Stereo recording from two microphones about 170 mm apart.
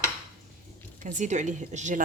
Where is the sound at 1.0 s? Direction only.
45° right (ahead or behind).